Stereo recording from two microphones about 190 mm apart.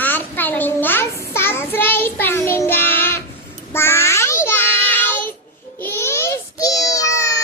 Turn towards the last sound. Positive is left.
turn(degrees=15)  # may be behind; listen again after turning